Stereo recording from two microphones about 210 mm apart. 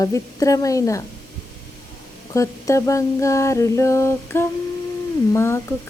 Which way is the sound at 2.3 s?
15° left (ahead or behind).